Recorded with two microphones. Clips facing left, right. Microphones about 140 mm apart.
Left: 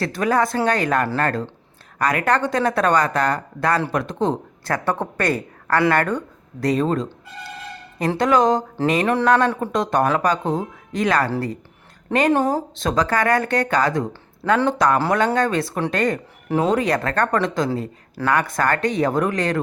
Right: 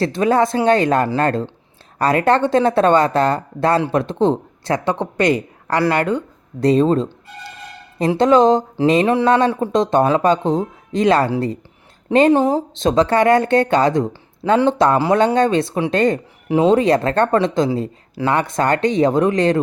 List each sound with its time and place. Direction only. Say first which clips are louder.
0.0 s speech: right 4 dB; 25° right (ahead or behind)
8.2 s speech: right 5 dB; 25° right (ahead or behind)